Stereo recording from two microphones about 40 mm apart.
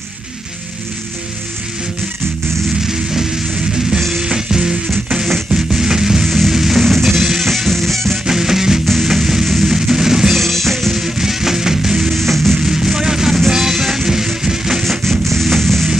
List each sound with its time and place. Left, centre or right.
2.9 s music: centre
6.2 s music: centre
8.3 s music: centre
8.8 s music: centre
10.3 s drum kit: centre
11.0 s music: centre
12.1 s music: centre
12.5 s music: centre
14.9 s music: centre